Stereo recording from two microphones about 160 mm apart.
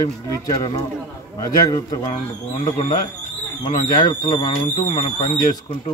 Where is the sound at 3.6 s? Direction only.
25° left (ahead or behind).